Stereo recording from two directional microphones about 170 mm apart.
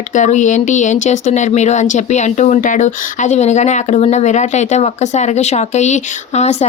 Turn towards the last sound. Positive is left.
turn(degrees=40)  # may be behind; listen again after turning